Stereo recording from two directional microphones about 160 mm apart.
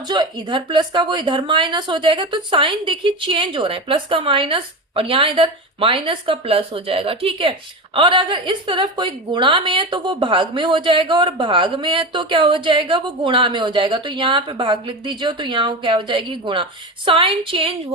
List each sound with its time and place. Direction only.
0.0 s a woman's voice: 25° right (ahead or behind)